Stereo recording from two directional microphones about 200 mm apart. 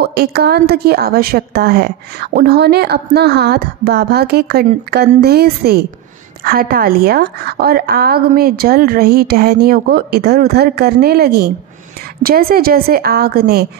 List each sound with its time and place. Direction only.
0.0 s a woman's voice: 50° right (ahead or behind)